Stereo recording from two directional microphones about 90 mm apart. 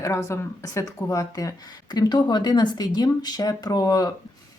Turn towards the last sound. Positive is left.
turn(degrees=45)  # may be behind; listen again after turning